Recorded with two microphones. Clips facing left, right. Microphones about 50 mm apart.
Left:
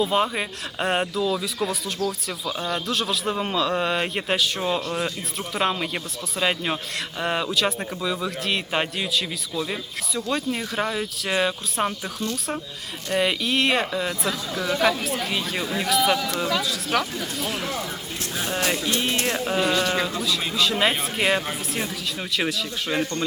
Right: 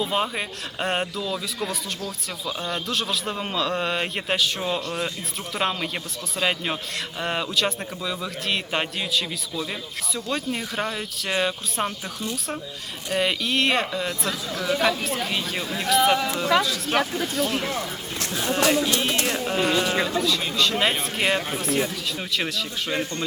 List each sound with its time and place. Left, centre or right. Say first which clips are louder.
0.0 s speech: left 3 dB; centre
13.1 s speech: left 1 dB; centre
16.9 s speech: right 1 dB; right
17.3 s speech: right 3 dB; centre